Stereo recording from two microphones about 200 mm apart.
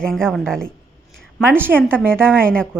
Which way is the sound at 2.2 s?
5° left (ahead or behind).